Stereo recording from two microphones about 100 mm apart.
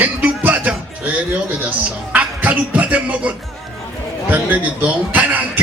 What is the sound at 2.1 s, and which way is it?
A man's voice, 15° right (ahead or behind).